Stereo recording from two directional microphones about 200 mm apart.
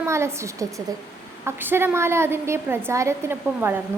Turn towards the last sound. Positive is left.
turn(degrees=-10)  # may be behind; listen again after turning